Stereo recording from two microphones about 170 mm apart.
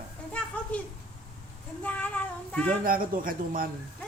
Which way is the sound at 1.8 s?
10° left (ahead or behind).